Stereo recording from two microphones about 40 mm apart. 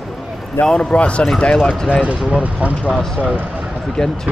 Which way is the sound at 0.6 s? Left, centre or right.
Centre.